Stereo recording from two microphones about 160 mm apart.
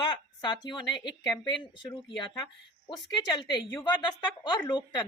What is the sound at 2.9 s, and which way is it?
A woman's voice, 25° left (ahead or behind).